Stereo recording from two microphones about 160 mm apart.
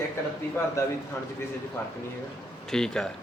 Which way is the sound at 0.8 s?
20° left (ahead or behind).